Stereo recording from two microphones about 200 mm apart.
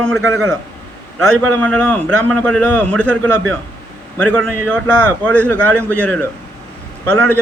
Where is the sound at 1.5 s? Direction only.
5° left (ahead or behind).